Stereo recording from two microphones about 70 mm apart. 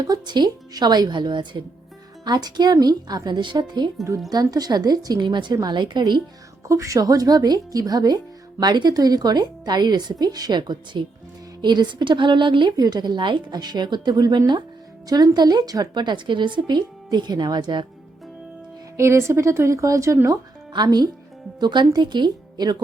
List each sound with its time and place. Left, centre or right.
0.0 s a woman's voice: right
4.3 s a woman's voice: right
6.7 s a woman's voice: right
8.6 s a woman's voice: right
15.1 s a woman's voice: right
18.9 s a woman's voice: right
20.2 s speech: right
21.6 s a woman's voice: right